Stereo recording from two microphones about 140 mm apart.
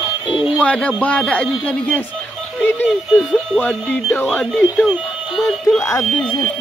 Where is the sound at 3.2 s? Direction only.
5° left (ahead or behind).